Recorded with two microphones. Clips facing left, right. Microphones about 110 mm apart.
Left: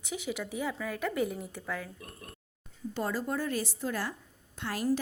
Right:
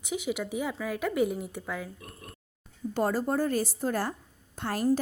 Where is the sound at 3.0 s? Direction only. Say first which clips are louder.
Right 6 dB; 45° right (ahead or behind).